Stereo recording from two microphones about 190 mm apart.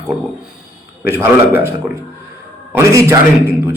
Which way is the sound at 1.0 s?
10° right (ahead or behind).